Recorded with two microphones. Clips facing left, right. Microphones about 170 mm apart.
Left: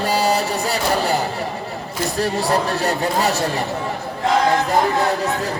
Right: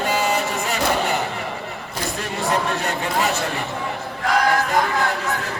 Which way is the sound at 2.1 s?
35° left (ahead or behind).